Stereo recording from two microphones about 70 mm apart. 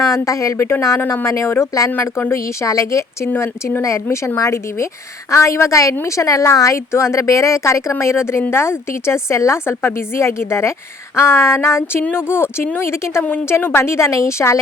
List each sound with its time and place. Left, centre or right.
0.0 s speech: left
1.9 s speech: left